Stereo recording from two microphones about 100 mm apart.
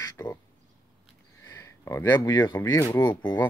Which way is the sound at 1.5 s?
30° left (ahead or behind).